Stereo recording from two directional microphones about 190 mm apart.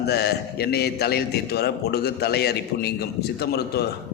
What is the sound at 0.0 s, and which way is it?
A man's voice, 60° left (ahead or behind).